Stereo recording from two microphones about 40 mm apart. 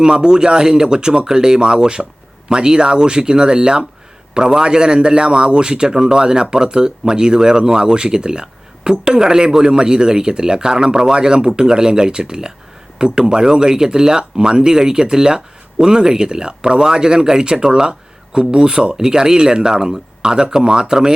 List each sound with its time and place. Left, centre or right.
0.0 s a man's voice: centre